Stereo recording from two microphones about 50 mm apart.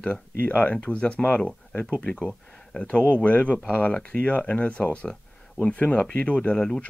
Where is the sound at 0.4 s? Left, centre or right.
Left.